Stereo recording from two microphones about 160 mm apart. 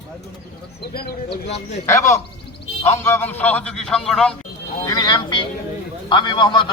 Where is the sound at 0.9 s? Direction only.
90° left.